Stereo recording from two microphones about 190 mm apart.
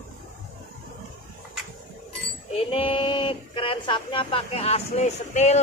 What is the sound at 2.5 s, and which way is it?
Speech, 30° left (ahead or behind).